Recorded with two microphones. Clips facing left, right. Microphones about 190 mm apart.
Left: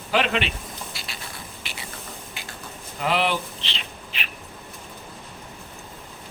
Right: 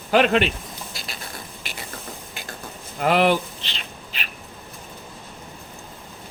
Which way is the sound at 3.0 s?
50° right (ahead or behind).